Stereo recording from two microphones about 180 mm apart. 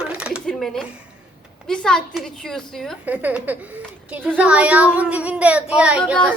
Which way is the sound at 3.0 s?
10° right (ahead or behind).